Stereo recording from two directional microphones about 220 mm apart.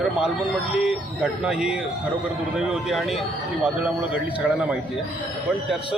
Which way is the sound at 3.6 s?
5° right (ahead or behind).